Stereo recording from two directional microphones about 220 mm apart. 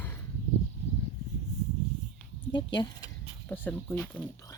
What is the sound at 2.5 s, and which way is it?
Speech, 20° left (ahead or behind).